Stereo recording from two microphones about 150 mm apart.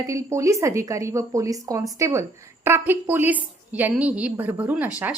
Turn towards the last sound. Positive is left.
turn(degrees=-10)  # may be behind; listen again after turning